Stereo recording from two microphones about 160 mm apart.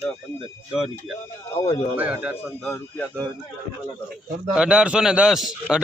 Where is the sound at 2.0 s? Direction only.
10° right (ahead or behind).